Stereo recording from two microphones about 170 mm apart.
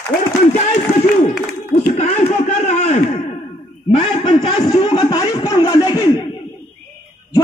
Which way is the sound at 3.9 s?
30° left (ahead or behind).